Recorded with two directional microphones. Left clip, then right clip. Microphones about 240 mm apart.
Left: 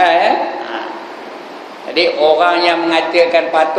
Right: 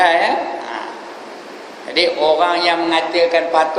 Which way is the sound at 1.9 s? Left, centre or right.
Centre.